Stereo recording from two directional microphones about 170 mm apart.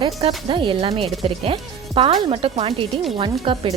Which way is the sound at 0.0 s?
35° right (ahead or behind).